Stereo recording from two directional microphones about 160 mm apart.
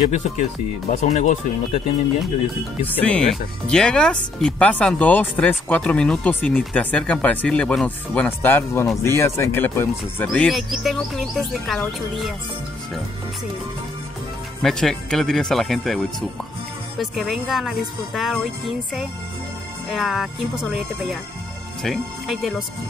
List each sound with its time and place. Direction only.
0.1 s speech: 50° left (ahead or behind)
2.9 s speech: 10° left (ahead or behind)
14.6 s speech: 5° left (ahead or behind)
19.9 s speech: centre (ahead or behind)